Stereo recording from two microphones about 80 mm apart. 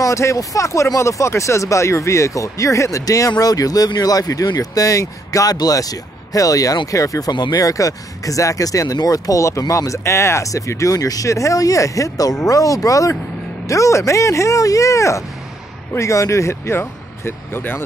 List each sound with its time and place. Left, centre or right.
0.0 s speech: left
7.5 s speech: left